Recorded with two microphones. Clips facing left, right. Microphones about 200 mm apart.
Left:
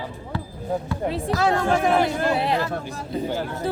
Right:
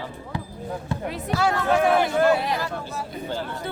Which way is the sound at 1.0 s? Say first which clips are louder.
Left 2 dB; 30° left (ahead or behind).